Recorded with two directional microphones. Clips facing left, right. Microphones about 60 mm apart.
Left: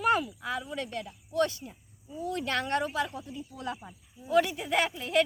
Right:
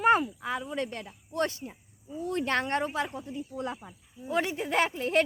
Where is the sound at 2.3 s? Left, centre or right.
Right.